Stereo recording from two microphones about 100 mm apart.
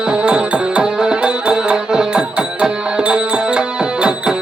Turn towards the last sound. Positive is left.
turn(degrees=-10)  # may be behind; listen again after turning